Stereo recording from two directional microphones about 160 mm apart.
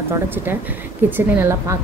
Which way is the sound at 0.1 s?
15° right (ahead or behind).